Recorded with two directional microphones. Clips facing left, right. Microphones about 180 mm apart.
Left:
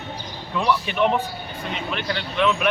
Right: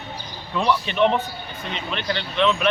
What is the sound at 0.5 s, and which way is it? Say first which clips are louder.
A man's voice: right 1 dB; 5° left (ahead or behind).